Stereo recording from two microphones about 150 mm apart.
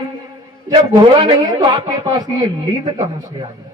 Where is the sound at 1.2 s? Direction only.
30° right (ahead or behind).